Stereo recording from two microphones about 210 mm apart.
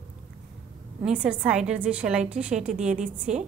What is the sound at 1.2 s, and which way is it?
A woman's voice, 5° right (ahead or behind).